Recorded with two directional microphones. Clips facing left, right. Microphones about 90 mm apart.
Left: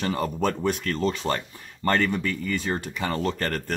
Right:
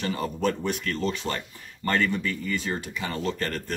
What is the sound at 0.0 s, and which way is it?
Speech, 45° left (ahead or behind).